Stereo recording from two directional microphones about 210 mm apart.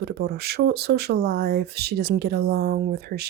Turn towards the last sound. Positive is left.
turn(degrees=-50)  # may be behind; listen again after turning